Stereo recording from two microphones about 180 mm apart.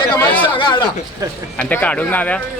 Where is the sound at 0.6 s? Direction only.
25° left (ahead or behind).